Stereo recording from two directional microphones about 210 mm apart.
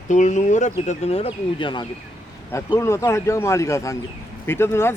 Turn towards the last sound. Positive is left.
turn(degrees=10)  # may be behind; listen again after turning